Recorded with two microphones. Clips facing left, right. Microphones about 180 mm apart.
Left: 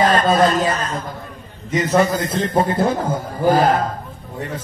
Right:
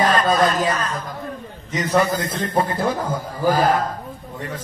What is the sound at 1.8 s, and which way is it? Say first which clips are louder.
A man's voice: left 3 dB; 25° left (ahead or behind).